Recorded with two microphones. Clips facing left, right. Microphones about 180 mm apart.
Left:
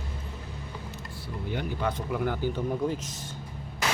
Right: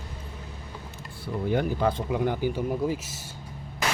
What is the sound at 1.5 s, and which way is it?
Speech, 45° right (ahead or behind).